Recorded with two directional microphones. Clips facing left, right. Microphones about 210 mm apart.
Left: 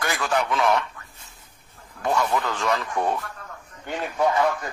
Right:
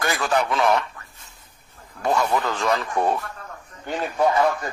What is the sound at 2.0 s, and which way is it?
Speech, 35° right (ahead or behind).